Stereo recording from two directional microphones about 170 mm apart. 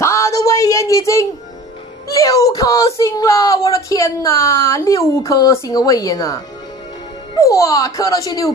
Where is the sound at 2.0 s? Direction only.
20° left (ahead or behind).